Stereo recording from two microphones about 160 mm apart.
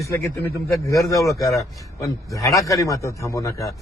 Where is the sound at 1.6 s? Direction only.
20° left (ahead or behind).